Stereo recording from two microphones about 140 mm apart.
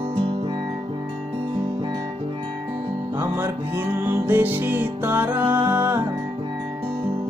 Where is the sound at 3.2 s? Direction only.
15° right (ahead or behind).